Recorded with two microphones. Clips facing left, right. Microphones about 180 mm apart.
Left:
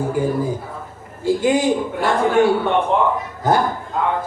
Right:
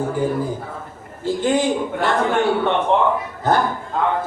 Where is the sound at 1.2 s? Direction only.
10° left (ahead or behind).